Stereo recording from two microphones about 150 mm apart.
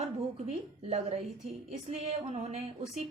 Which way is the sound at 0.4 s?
45° right (ahead or behind).